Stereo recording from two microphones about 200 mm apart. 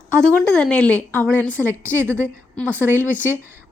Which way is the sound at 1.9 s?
10° right (ahead or behind).